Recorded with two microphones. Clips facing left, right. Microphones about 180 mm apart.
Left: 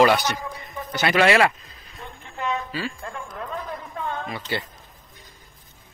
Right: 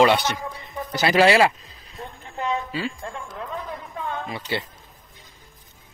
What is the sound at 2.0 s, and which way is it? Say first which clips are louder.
Music: right 2 dB; 35° right (ahead or behind).